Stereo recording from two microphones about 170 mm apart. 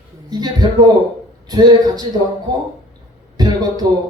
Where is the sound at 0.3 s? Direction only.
25° right (ahead or behind).